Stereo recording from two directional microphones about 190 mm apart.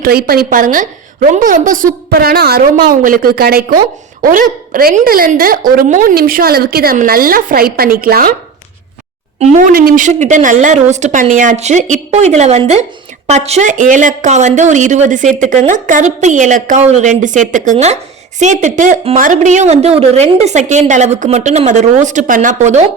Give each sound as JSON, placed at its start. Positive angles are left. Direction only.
{"t": 0.0, "sound": "a woman's voice", "side_deg": -55}
{"t": 9.4, "sound": "a woman's voice", "side_deg": -35}
{"t": 9.7, "sound": "a woman's voice", "side_deg": -50}